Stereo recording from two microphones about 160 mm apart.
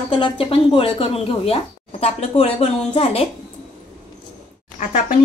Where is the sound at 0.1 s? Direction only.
35° left (ahead or behind).